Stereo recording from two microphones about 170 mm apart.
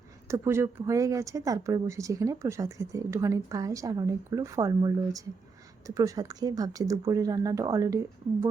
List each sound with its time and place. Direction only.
0.3 s speech: 15° right (ahead or behind)